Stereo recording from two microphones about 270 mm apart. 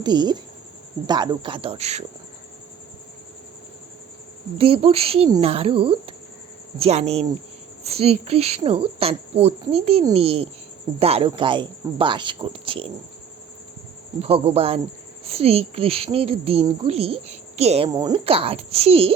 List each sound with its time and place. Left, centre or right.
0.0 s speech: centre
4.5 s speech: centre
14.2 s speech: right